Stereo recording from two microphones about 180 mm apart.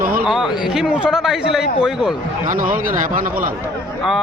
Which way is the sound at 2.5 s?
50° right (ahead or behind).